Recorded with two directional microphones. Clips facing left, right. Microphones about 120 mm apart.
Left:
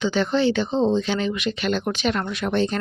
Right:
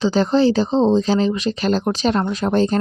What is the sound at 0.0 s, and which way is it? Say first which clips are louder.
Speech: right 5 dB; 35° right (ahead or behind).